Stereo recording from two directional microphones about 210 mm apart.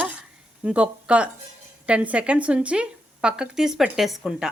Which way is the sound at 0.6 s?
5° right (ahead or behind).